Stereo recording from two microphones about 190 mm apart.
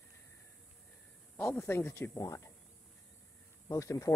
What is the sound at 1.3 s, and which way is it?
Speech, 5° left (ahead or behind).